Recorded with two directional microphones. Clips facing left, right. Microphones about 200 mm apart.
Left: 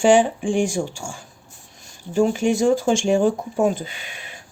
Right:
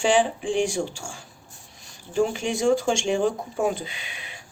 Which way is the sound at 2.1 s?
45° left (ahead or behind).